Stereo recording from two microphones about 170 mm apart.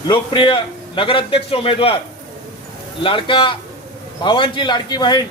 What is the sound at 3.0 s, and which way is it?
A man's voice, 30° left (ahead or behind).